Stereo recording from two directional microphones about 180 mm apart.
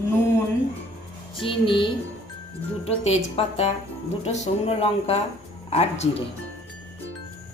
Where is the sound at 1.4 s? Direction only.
30° left (ahead or behind).